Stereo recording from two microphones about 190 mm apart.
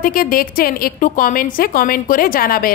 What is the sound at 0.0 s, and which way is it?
A woman's voice, 50° left (ahead or behind).